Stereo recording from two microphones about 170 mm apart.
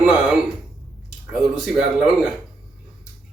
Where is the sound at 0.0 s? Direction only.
5° right (ahead or behind).